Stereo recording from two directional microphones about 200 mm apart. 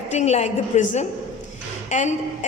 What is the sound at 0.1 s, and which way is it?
A woman's voice, 35° left (ahead or behind).